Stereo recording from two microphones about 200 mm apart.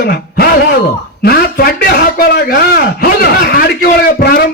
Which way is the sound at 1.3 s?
50° left (ahead or behind).